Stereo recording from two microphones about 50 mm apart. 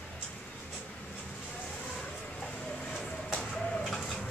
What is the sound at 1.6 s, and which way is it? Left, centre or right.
Vehicle, centre.